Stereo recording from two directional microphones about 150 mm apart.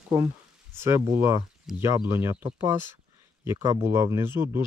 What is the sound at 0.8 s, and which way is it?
Speech, 20° right (ahead or behind).